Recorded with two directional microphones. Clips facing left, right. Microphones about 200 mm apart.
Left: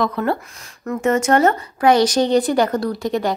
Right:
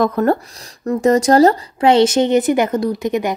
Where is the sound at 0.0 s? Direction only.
45° right (ahead or behind).